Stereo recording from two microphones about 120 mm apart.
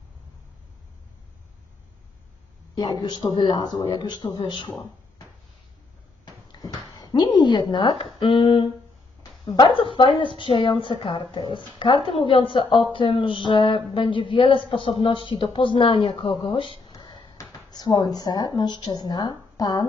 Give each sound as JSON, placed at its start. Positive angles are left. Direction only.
{"t": 2.7, "sound": "speech", "side_deg": 35}
{"t": 6.2, "sound": "a sound", "side_deg": 35}
{"t": 7.7, "sound": "speech", "side_deg": 40}
{"t": 16.9, "sound": "speech", "side_deg": 35}